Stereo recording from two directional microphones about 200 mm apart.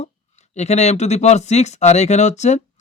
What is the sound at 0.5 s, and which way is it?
Speech, 35° left (ahead or behind).